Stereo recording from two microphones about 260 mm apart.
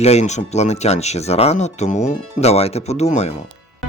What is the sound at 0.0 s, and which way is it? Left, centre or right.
Speech, left.